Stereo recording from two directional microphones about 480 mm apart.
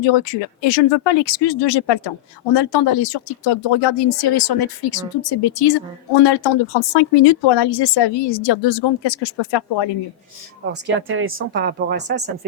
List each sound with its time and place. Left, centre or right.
0.0 s speech: left
10.7 s a woman's voice: right